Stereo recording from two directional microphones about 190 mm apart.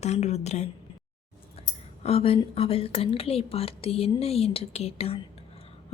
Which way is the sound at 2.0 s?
30° left (ahead or behind).